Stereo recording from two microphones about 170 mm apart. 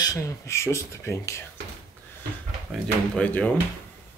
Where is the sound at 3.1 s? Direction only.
5° left (ahead or behind).